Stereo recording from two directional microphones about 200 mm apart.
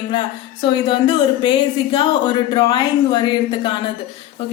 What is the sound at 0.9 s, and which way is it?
Speech, 25° left (ahead or behind).